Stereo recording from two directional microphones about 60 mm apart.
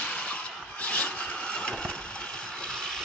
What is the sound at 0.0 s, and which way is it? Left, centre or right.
Engine, left.